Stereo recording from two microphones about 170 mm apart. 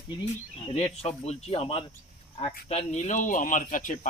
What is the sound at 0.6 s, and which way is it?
Speech, 35° left (ahead or behind).